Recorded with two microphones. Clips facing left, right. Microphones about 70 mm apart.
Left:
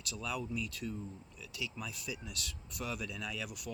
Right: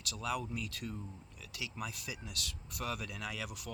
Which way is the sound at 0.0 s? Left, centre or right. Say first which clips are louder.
Right 2 dB; right.